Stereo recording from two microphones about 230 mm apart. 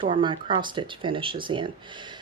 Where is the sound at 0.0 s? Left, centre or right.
Right.